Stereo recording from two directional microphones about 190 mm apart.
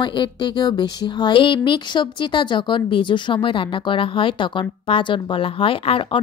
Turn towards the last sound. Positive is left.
turn(degrees=30)  # may be behind; listen again after turning